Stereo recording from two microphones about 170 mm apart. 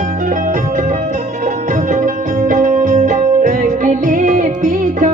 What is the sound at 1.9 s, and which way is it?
Music, 50° right (ahead or behind).